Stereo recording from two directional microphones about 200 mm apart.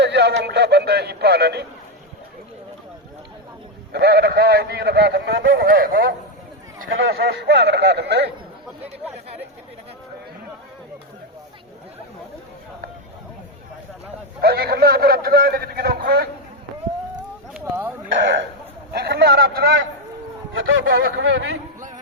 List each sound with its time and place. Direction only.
0.0 s radio: 60° right (ahead or behind)
3.9 s a man's voice: 50° right (ahead or behind)
5.6 s a man's voice: 45° right (ahead or behind)
6.8 s speech: 80° right
7.1 s speech: 55° right (ahead or behind)
14.4 s a man's voice: 50° right (ahead or behind)
17.5 s a sound: 10° right (ahead or behind)
18.9 s a man's voice: 55° right (ahead or behind)
20.5 s speech: 75° right (ahead or behind)